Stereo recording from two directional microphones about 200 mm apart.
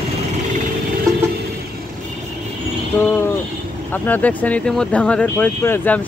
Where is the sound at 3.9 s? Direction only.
10° left (ahead or behind).